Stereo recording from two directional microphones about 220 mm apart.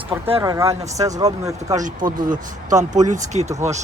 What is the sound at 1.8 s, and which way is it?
Speech, 35° right (ahead or behind).